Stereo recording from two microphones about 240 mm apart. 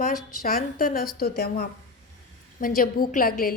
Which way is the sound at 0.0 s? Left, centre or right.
Left.